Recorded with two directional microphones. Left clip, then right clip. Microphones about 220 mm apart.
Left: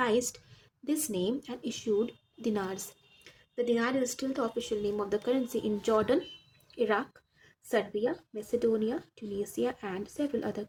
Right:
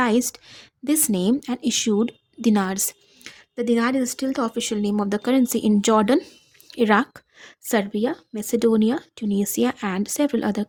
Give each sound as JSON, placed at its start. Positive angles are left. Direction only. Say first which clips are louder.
{"t": 0.0, "sound": "a woman's voice", "louder": "right 7 dB", "side_deg": -50}